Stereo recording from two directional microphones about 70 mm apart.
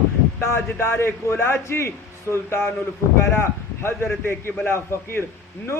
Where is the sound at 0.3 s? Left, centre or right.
Left.